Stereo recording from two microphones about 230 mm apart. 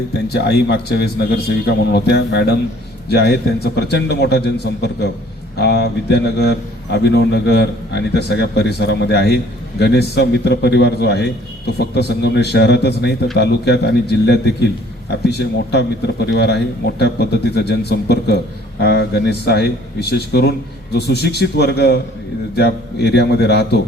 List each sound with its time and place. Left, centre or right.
0.3 s a man's voice: left